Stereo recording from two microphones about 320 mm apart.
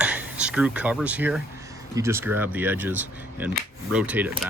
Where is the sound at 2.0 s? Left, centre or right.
Centre.